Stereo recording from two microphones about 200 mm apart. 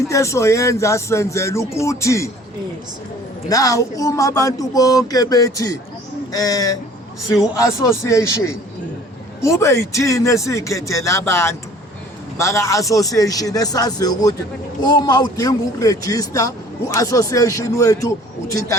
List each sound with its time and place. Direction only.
0.1 s a man's voice: 15° left (ahead or behind)
3.5 s a man's voice: 15° left (ahead or behind)